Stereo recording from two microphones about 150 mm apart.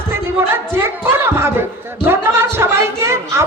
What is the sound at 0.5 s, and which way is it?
A woman's voice, 15° right (ahead or behind).